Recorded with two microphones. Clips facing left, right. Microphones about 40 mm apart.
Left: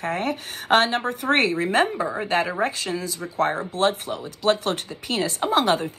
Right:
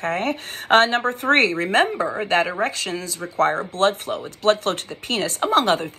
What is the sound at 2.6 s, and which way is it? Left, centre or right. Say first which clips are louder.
A woman's voice: right 1 dB; right.